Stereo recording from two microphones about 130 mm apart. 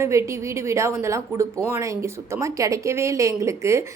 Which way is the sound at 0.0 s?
20° right (ahead or behind).